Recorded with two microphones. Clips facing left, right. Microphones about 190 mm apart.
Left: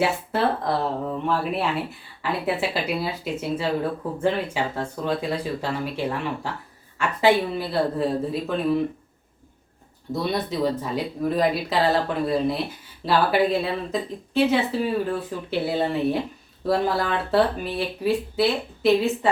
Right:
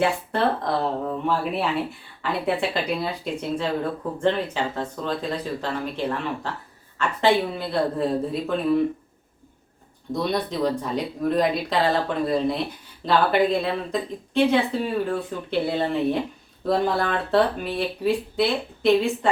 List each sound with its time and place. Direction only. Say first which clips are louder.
0.0 s speech: even; 5° left (ahead or behind)
10.1 s speech: right 1 dB; 5° left (ahead or behind)